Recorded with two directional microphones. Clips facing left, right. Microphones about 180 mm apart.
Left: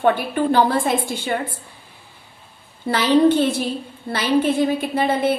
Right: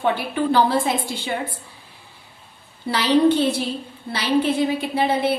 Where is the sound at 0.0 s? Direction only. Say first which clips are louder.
Left 3 dB; 50° left (ahead or behind).